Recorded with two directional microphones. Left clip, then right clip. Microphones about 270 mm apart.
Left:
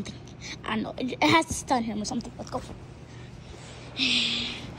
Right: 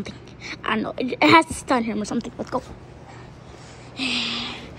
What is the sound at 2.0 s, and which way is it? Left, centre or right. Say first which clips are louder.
Speech: right 5 dB; centre.